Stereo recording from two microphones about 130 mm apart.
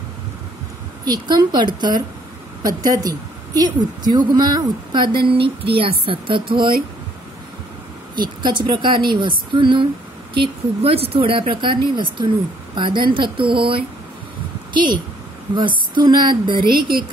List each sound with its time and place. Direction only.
1.0 s a woman's voice: 35° right (ahead or behind)
8.2 s a woman's voice: 35° right (ahead or behind)